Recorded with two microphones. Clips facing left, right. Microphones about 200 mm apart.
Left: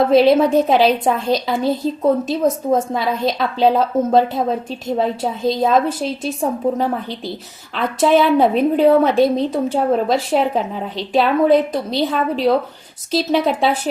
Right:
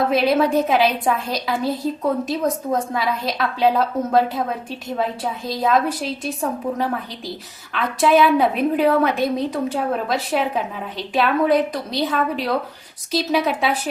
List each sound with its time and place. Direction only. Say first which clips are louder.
0.1 s a woman's voice: left 5 dB; 25° left (ahead or behind)